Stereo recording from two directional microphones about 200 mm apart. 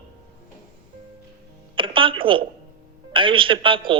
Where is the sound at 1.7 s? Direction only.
25° right (ahead or behind).